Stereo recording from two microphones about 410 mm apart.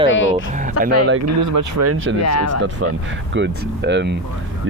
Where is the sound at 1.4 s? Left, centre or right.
Right.